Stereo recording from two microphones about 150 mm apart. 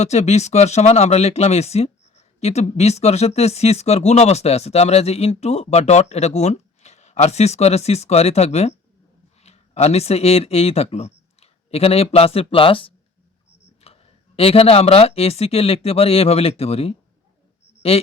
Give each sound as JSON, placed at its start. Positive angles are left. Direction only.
{"t": 0.0, "sound": "speech", "side_deg": 45}